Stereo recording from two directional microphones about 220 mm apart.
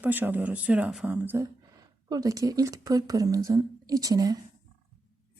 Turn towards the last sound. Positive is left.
turn(degrees=-15)  # may be behind; listen again after turning